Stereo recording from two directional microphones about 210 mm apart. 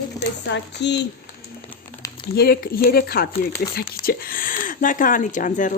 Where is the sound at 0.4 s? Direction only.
55° left (ahead or behind).